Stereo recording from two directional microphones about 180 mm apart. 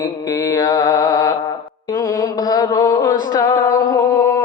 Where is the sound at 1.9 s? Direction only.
20° left (ahead or behind).